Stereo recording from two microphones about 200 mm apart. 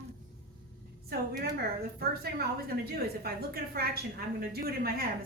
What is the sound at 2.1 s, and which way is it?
A woman's voice, 50° right (ahead or behind).